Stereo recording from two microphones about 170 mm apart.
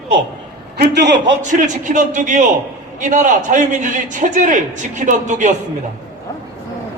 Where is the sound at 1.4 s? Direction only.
50° right (ahead or behind).